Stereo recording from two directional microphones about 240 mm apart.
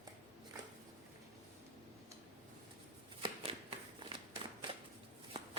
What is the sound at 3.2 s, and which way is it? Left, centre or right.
Shuffling cards, right.